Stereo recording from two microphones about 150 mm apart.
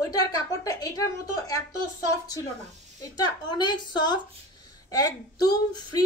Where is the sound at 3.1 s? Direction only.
25° left (ahead or behind).